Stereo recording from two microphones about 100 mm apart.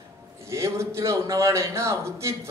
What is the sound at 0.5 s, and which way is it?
A man's voice, 30° right (ahead or behind).